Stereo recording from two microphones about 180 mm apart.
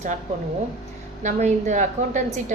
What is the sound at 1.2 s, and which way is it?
Speech, 40° right (ahead or behind).